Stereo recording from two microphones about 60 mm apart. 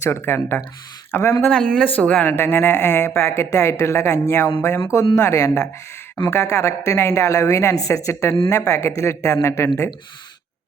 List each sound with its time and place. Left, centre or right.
0.0 s speech: left
1.5 s speech: centre
2.3 s speech: left
3.2 s speech: left
4.9 s speech: left
6.2 s speech: left